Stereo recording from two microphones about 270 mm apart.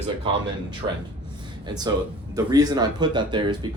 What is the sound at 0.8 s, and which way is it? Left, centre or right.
Speech, centre.